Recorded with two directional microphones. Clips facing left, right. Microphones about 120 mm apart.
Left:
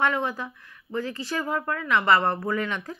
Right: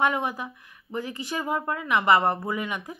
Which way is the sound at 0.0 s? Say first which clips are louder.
Even; 15° right (ahead or behind).